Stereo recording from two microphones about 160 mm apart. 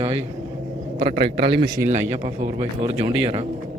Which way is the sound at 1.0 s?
80° right.